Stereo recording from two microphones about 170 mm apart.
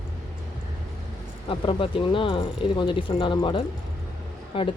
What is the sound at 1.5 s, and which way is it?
A woman's voice, 30° left (ahead or behind).